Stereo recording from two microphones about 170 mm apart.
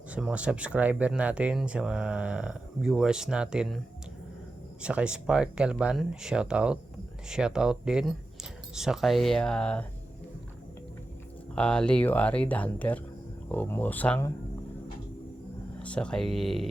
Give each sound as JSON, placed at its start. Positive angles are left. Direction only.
{"t": 0.1, "sound": "speech", "side_deg": -5}
{"t": 4.8, "sound": "speech", "side_deg": -5}
{"t": 11.5, "sound": "speech", "side_deg": 5}
{"t": 15.8, "sound": "speech", "side_deg": 5}